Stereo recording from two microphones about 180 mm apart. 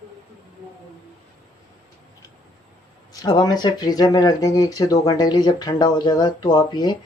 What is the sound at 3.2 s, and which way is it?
Speech, 20° left (ahead or behind).